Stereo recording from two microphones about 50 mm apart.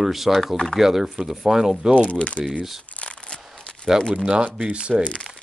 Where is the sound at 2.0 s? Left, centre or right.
Left.